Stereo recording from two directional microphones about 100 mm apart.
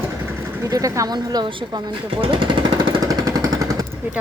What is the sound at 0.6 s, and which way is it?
Speech, 35° right (ahead or behind).